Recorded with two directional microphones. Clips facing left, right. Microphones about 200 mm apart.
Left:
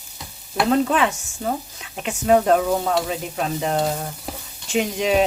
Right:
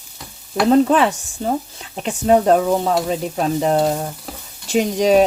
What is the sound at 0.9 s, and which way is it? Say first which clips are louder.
Sizzle: right 5 dB; 35° right (ahead or behind).